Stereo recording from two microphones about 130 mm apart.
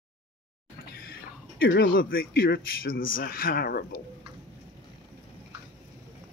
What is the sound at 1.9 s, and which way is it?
A man's voice, 90° left.